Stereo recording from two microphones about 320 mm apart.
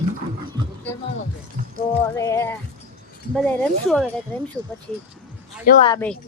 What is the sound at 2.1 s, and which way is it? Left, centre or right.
Speech, centre.